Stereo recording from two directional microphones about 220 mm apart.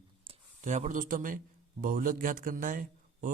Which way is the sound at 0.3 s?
35° right (ahead or behind).